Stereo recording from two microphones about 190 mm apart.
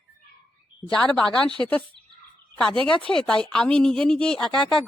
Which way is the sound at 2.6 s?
5° left (ahead or behind).